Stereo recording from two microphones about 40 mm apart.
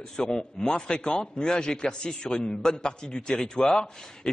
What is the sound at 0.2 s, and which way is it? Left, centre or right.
A man's voice, centre.